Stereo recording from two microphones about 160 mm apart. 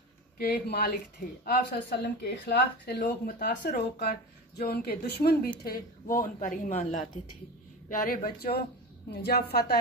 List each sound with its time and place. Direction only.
0.4 s speech: 90° left
9.1 s a woman's voice: 90° left